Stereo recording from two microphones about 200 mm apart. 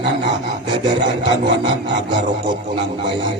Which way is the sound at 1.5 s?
55° right (ahead or behind).